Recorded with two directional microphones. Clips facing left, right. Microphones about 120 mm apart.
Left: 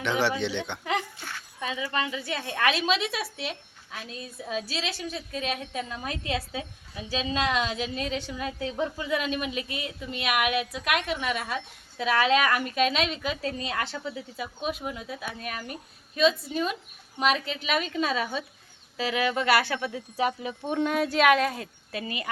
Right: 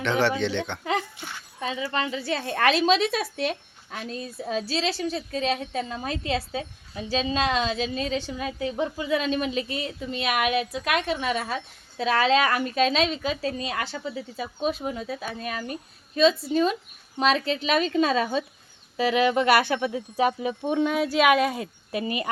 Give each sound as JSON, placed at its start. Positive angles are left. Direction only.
{"t": 0.0, "sound": "speech", "side_deg": 10}
{"t": 0.9, "sound": "a child's voice", "side_deg": -20}
{"t": 20.7, "sound": "speech", "side_deg": -5}